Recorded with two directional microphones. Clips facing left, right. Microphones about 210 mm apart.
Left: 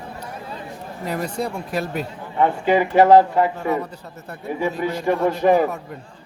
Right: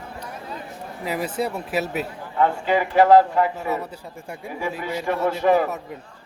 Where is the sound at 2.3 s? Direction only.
20° left (ahead or behind).